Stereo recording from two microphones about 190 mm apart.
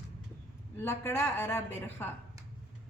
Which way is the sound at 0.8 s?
10° left (ahead or behind).